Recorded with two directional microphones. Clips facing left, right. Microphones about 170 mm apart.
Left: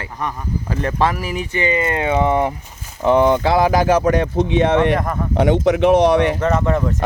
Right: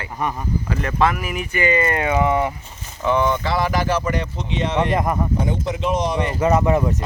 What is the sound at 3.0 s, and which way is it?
Speech, 45° left (ahead or behind).